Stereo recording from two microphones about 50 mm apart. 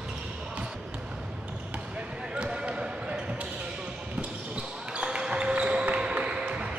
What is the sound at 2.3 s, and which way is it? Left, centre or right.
Basketball bounce, centre.